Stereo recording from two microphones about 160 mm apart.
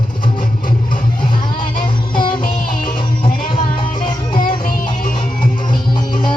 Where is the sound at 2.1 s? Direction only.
30° left (ahead or behind).